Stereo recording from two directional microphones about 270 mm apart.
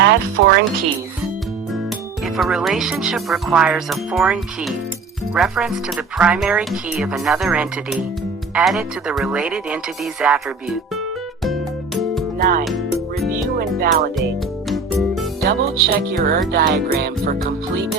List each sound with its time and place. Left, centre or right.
0.0 s speech: right
2.2 s speech: centre
12.4 s music: right
14.7 s music: centre
15.4 s music: right